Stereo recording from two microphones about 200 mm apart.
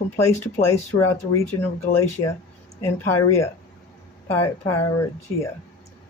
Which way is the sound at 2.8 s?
15° left (ahead or behind).